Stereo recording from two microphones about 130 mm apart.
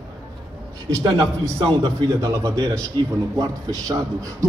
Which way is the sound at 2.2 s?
25° right (ahead or behind).